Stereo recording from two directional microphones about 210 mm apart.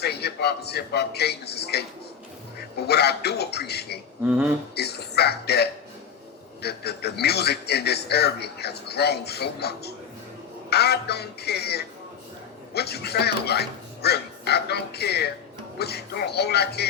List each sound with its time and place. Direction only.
0.0 s a man's voice: 50° left (ahead or behind)